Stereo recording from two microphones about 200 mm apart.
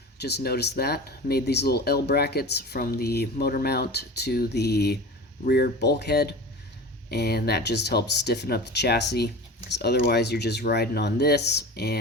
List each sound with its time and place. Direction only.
0.2 s speech: 55° left (ahead or behind)